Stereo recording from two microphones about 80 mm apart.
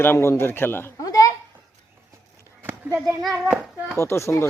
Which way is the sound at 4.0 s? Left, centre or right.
Left.